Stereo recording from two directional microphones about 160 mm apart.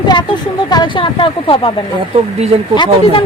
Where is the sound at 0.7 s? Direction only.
30° left (ahead or behind).